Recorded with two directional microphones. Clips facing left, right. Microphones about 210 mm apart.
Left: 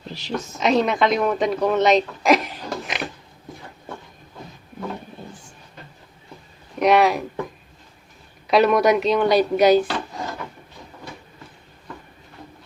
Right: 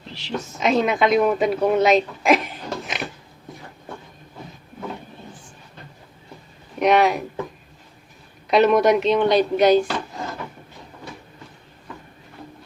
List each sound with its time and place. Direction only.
0.1 s a sound: 40° left (ahead or behind)
0.6 s a woman's voice: centre (ahead or behind)
6.7 s speech: centre (ahead or behind)
8.4 s a woman's voice: centre (ahead or behind)